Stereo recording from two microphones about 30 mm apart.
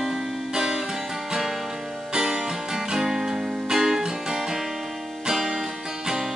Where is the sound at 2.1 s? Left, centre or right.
Right.